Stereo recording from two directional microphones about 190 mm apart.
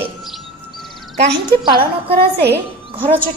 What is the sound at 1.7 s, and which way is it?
Speech, 55° right (ahead or behind).